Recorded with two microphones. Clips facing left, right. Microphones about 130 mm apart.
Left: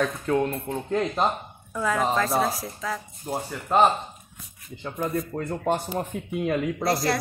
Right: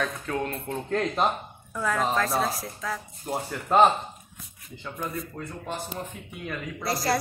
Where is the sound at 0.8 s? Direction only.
5° left (ahead or behind).